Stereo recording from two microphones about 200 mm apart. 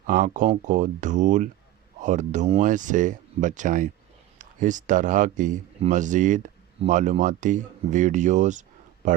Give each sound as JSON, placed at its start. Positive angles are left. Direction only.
{"t": 0.1, "sound": "speech", "side_deg": -40}